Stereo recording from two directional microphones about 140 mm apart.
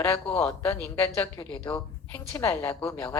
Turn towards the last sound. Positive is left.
turn(degrees=20)  # may be behind; listen again after turning